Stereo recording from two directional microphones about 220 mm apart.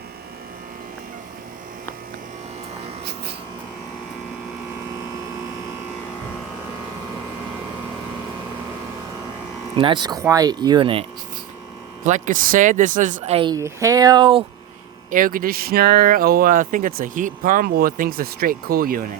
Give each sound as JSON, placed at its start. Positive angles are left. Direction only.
{"t": 9.7, "sound": "speech", "side_deg": -20}
{"t": 12.0, "sound": "speech", "side_deg": -35}
{"t": 15.1, "sound": "speech", "side_deg": -40}